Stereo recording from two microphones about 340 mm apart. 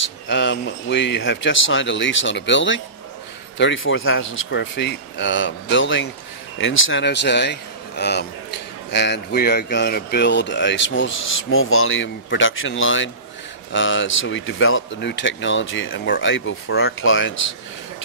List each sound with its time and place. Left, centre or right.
0.3 s speech: left